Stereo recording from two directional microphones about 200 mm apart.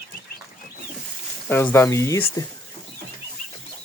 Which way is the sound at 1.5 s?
10° left (ahead or behind).